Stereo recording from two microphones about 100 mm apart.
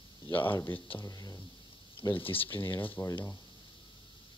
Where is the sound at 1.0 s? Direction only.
35° left (ahead or behind).